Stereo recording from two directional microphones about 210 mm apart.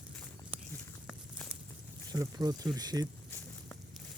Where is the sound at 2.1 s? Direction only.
20° right (ahead or behind).